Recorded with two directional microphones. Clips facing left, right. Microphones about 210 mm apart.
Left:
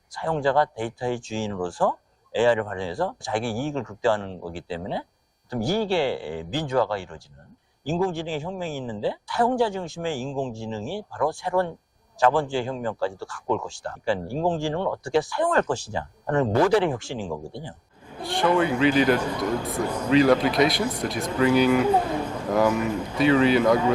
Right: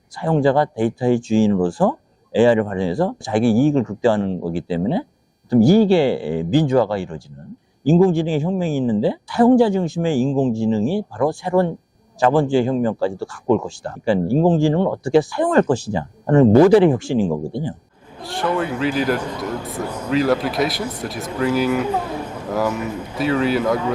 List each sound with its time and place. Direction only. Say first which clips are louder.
0.2 s speech: right 6 dB; 10° right (ahead or behind)
10.2 s speech: right 10 dB; 45° right (ahead or behind)
10.6 s speech: right 12 dB; 10° right (ahead or behind)
21.8 s speech: left 1 dB; 10° left (ahead or behind)
22.2 s a sound: even; 10° right (ahead or behind)
22.4 s speech: even; 10° left (ahead or behind)
22.8 s speech: left 1 dB; 10° right (ahead or behind)